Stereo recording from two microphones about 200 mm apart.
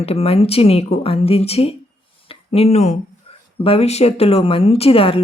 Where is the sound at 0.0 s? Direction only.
30° left (ahead or behind).